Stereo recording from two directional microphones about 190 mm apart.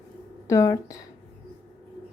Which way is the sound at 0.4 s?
15° left (ahead or behind).